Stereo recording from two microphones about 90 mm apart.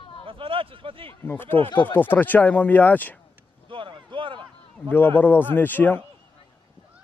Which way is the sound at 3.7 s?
70° right (ahead or behind).